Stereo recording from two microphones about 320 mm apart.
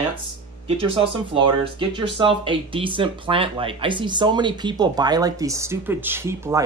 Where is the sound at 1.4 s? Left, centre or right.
Centre.